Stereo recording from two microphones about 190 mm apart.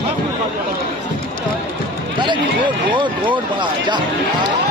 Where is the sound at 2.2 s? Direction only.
25° right (ahead or behind).